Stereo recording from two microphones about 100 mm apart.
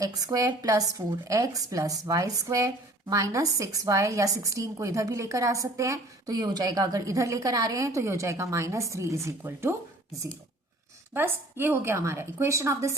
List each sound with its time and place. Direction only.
0.0 s speech: 35° right (ahead or behind)
11.1 s a woman's voice: 20° right (ahead or behind)